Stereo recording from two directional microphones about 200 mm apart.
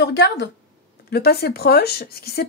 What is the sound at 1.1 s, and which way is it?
Speech, 55° left (ahead or behind).